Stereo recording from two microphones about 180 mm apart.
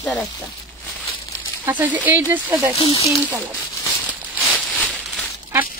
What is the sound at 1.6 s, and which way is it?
Speech, 10° right (ahead or behind).